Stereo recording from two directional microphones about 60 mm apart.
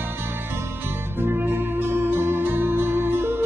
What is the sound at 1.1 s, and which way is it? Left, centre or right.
Music, right.